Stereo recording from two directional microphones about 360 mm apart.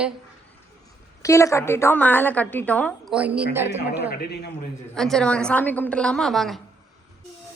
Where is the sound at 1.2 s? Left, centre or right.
Centre.